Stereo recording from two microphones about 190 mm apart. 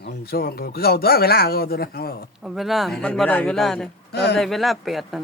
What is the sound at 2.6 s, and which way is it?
Speech, centre (ahead or behind).